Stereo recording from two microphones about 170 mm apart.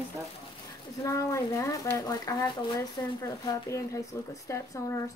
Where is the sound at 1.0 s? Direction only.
15° left (ahead or behind).